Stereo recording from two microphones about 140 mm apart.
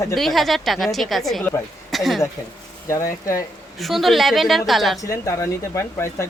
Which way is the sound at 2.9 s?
20° left (ahead or behind).